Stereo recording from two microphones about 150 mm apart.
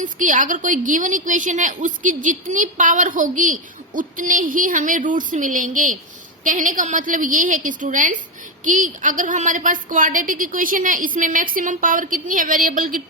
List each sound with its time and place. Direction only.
0.0 s a woman's voice: 60° right (ahead or behind)